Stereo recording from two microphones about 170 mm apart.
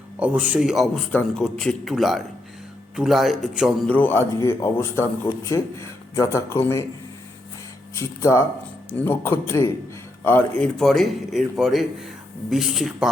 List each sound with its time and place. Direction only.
0.2 s a man's voice: 10° right (ahead or behind); by 6.8 s 15° left (ahead or behind)
7.9 s a man's voice: 15° left (ahead or behind); by 13.1 s centre (ahead or behind)